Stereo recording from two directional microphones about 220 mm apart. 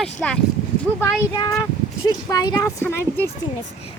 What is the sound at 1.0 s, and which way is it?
Speech, 20° left (ahead or behind).